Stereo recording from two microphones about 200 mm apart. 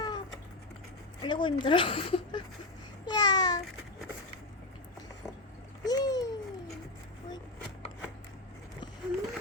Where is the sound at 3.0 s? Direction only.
20° left (ahead or behind).